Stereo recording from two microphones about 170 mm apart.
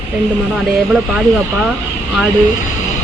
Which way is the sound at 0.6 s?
5° right (ahead or behind).